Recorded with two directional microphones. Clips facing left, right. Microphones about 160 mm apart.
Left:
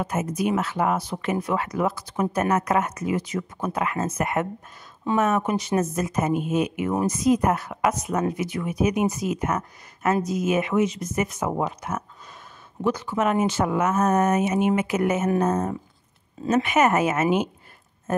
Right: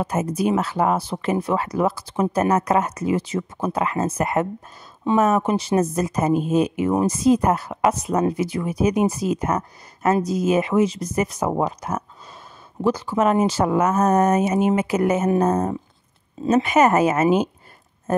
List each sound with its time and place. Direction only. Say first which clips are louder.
0.0 s speech: right 3 dB; 35° right (ahead or behind)